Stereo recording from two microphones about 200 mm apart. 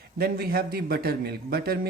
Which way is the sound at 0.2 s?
50° right (ahead or behind).